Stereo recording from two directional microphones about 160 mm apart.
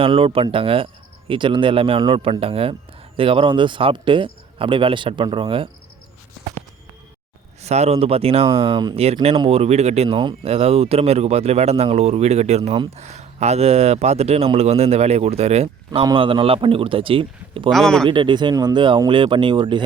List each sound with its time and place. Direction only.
0.0 s speech: 35° right (ahead or behind)
7.6 s speech: 45° right (ahead or behind)
9.5 s speech: 40° right (ahead or behind)
17.7 s speech: centre (ahead or behind)
18.1 s speech: 30° right (ahead or behind)